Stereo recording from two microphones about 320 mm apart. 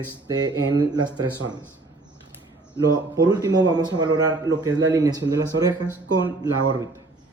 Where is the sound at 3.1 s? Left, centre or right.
Centre.